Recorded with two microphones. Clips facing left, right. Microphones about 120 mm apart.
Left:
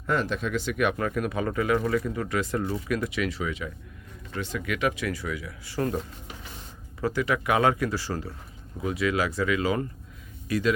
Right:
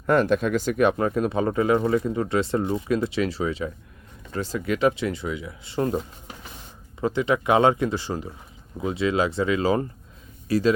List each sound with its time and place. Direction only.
0.1 s a man's voice: 50° right (ahead or behind); by 10.8 s 30° right (ahead or behind)